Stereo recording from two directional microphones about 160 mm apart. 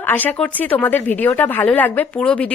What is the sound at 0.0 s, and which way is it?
Speech, 10° left (ahead or behind).